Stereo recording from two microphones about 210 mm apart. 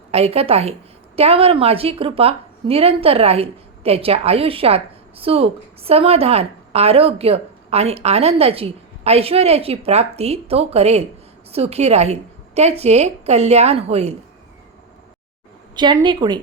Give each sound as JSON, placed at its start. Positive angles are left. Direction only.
{"t": 0.1, "sound": "a woman's voice", "side_deg": -30}
{"t": 15.7, "sound": "a woman's voice", "side_deg": -20}